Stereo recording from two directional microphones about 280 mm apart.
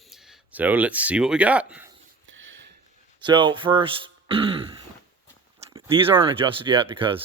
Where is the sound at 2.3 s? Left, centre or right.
Right.